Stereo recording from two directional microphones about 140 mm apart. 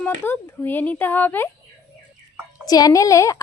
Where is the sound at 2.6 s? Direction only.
25° left (ahead or behind).